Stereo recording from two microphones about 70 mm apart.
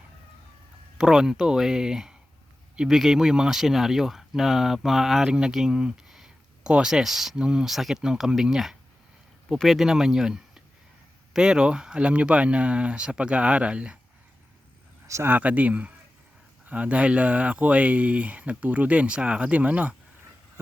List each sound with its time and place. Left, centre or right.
0.9 s speech: centre
15.0 s speech: right
15.3 s speech: right